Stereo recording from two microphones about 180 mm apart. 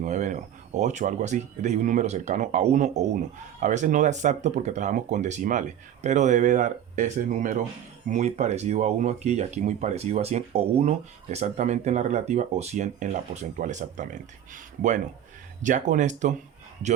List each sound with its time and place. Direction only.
0.0 s speech: 45° right (ahead or behind)